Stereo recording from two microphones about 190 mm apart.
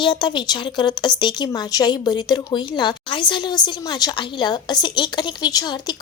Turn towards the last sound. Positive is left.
turn(degrees=20)  # may be behind; listen again after turning